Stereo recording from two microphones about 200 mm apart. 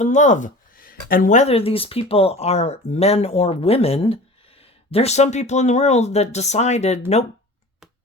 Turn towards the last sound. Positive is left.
turn(degrees=35)  # may be behind; listen again after turning